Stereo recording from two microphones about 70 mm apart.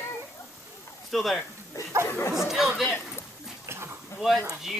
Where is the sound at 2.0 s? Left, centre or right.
Left.